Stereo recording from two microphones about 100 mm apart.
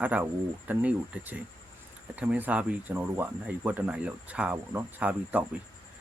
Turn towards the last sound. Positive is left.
turn(degrees=-15)  # may be behind; listen again after turning